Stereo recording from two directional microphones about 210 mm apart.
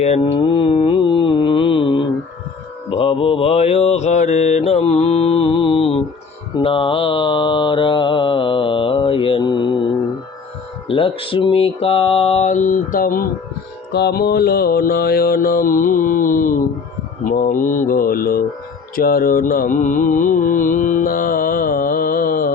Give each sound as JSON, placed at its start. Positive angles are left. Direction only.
{"t": 0.0, "sound": "mantra", "side_deg": 30}
{"t": 10.8, "sound": "music", "side_deg": 25}
{"t": 13.9, "sound": "mantra", "side_deg": 50}